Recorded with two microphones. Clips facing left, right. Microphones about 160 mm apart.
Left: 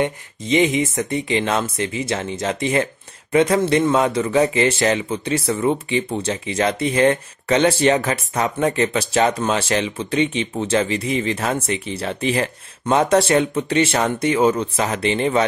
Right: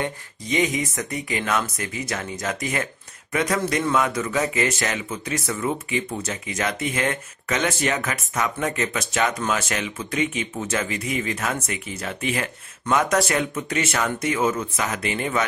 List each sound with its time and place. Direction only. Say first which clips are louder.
0.0 s a man's voice: left 6 dB; 25° left (ahead or behind)